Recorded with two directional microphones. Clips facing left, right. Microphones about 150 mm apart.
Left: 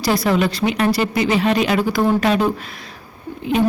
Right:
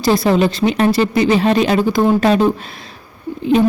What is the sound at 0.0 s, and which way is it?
A woman's voice, 25° right (ahead or behind).